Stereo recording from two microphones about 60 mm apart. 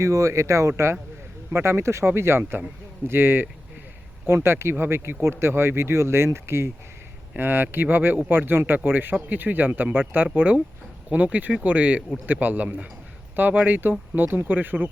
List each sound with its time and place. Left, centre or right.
0.0 s speech: right
1.5 s speech: right
7.3 s speech: right